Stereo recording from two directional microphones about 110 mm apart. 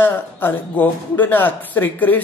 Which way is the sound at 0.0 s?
20° left (ahead or behind).